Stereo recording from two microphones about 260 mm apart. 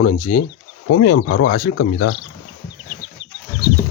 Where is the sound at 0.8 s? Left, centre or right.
Left.